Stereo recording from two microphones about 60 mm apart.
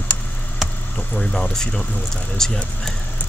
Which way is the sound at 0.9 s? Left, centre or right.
Centre.